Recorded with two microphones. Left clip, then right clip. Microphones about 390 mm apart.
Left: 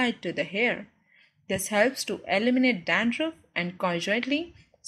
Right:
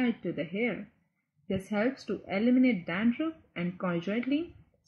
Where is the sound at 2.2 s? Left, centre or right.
Left.